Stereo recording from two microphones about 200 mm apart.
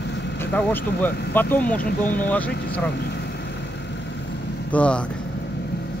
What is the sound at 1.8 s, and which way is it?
Speech, 40° left (ahead or behind).